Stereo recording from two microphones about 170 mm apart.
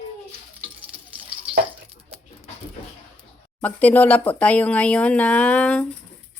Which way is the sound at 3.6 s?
10° left (ahead or behind).